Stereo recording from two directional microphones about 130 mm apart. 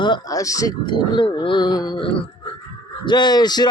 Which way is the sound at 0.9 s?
40° left (ahead or behind).